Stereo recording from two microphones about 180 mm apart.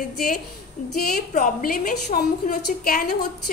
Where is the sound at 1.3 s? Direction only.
50° left (ahead or behind).